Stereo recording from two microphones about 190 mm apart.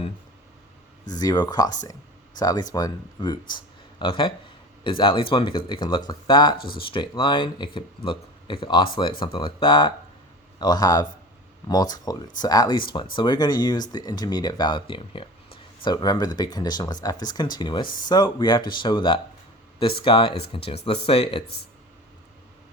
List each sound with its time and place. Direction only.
1.1 s speech: 20° left (ahead or behind)
3.5 s a sound: 25° left (ahead or behind)
4.8 s speech: 25° left (ahead or behind)
17.8 s speech: 45° left (ahead or behind)
18.1 s speech: 20° left (ahead or behind)